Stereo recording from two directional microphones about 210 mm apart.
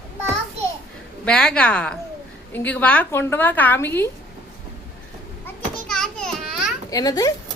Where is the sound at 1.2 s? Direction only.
5° left (ahead or behind).